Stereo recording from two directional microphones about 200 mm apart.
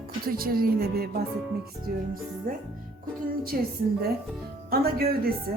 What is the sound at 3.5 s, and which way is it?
Speech, 50° right (ahead or behind).